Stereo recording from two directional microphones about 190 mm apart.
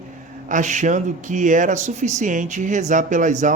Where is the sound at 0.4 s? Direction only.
40° right (ahead or behind).